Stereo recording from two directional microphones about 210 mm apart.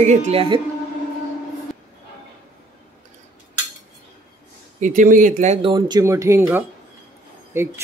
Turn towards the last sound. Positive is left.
turn(degrees=-10)  # may be behind; listen again after turning